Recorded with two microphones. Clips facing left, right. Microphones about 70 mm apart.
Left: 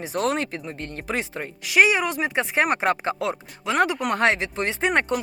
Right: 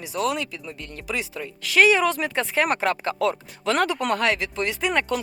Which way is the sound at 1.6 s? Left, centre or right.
Centre.